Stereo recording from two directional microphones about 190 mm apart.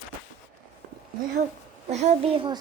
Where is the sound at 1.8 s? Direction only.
35° right (ahead or behind).